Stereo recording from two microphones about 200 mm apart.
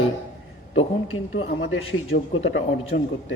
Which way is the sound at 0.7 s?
85° left.